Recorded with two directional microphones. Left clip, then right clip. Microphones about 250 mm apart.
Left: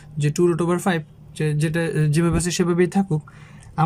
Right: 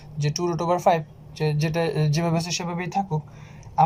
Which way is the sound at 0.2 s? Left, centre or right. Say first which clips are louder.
Left 6 dB; left.